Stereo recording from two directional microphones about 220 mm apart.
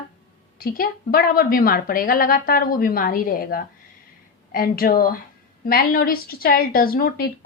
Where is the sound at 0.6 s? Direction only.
40° left (ahead or behind).